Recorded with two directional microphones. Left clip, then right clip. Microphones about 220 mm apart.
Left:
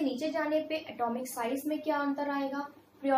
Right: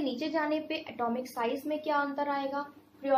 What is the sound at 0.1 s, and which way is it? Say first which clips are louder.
A woman's voice: even; 15° right (ahead or behind).